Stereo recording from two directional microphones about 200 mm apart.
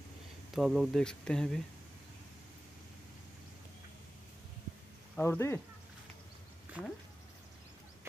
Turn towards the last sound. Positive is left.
turn(degrees=-5)  # may be behind; listen again after turning